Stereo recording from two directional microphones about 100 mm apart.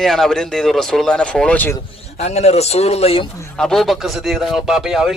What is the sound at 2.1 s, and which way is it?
Speech, 90° left.